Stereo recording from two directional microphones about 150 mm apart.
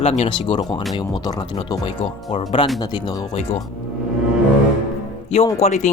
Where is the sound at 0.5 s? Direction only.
30° left (ahead or behind).